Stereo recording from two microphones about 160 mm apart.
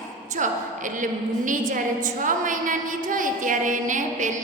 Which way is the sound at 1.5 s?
55° right (ahead or behind).